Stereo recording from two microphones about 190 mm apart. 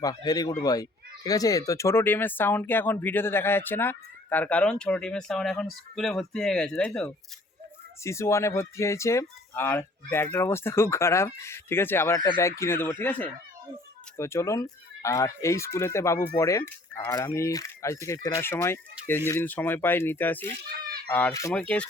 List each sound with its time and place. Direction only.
0.0 s speech: 20° left (ahead or behind); by 7.1 s 5° left (ahead or behind)
8.0 s speech: 15° left (ahead or behind)
20.8 s a sound: 50° right (ahead or behind)
21.1 s speech: 10° left (ahead or behind)